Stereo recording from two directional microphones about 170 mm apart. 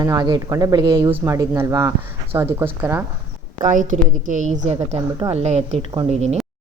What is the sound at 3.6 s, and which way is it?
A woman's voice, 50° right (ahead or behind).